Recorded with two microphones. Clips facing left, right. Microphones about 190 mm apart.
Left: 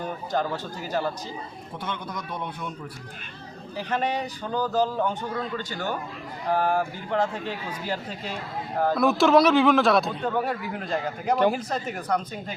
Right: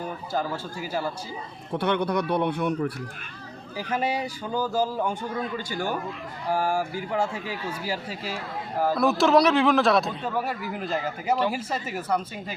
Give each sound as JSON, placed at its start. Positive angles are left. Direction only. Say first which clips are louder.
{"t": 0.3, "sound": "speech", "louder": "left 1 dB", "side_deg": -10}
{"t": 1.8, "sound": "speech", "louder": "right 10 dB", "side_deg": -70}
{"t": 3.8, "sound": "a man's voice", "louder": "even", "side_deg": -10}